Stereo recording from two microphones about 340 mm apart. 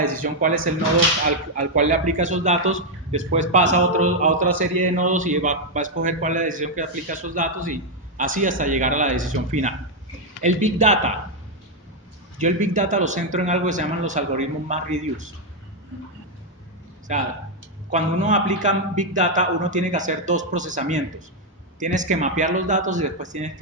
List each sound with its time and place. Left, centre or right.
0.0 s a man's voice: right
12.4 s a man's voice: right
17.1 s a man's voice: right